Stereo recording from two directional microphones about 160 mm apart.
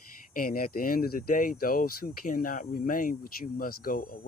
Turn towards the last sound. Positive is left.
turn(degrees=65)  # may be behind; listen again after turning